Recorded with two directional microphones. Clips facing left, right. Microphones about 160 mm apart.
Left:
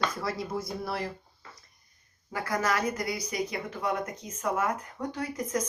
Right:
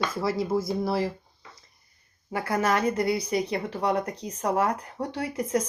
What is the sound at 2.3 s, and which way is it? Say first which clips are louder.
Speech: right 4 dB; 25° right (ahead or behind).